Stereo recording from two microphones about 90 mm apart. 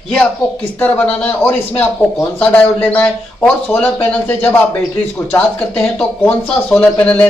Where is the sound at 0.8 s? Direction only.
15° left (ahead or behind).